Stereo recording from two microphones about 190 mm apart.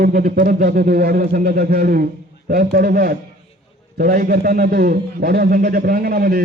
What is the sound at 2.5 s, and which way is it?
A man's voice, 50° right (ahead or behind).